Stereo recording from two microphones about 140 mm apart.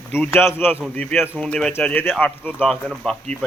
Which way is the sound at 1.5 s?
10° left (ahead or behind).